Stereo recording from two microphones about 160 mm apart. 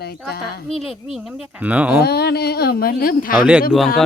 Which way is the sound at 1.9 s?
90° left.